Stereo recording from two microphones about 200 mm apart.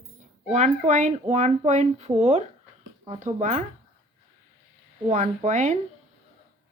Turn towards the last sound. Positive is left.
turn(degrees=-35)  # may be behind; listen again after turning